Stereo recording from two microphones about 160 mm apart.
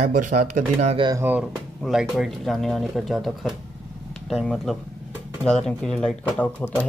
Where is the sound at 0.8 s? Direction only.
35° right (ahead or behind).